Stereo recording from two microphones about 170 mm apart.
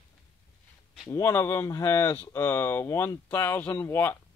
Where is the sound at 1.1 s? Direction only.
15° left (ahead or behind).